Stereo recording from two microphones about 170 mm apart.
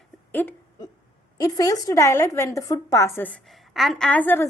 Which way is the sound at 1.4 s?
20° left (ahead or behind).